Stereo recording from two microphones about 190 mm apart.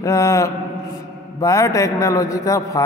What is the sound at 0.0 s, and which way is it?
A man's voice, 15° left (ahead or behind).